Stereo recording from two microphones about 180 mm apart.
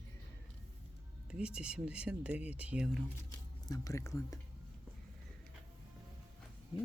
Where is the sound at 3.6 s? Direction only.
20° left (ahead or behind).